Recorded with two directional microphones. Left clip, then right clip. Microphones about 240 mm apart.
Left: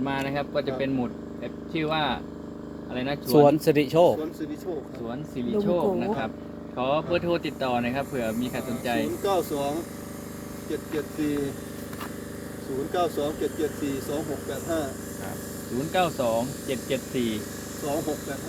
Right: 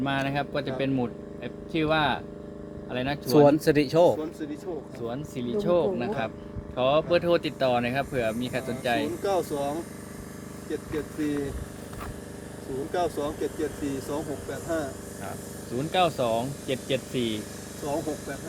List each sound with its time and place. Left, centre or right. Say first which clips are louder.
0.0 s speech: even; right
3.4 s a man's voice: even; centre
5.0 s speech: right 2 dB; right
9.2 s speech: left 1 dB; centre
10.9 s speech: left 2 dB; centre
12.9 s speech: left 2 dB; centre
15.9 s speech: even; right